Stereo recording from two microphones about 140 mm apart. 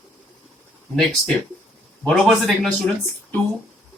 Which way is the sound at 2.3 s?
Centre (ahead or behind).